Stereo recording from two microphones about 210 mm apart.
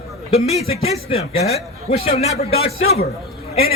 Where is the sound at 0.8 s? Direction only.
30° left (ahead or behind).